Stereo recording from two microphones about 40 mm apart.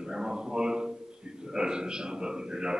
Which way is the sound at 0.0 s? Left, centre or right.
Centre.